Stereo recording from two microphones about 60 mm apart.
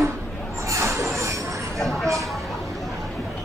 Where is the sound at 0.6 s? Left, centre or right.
Right.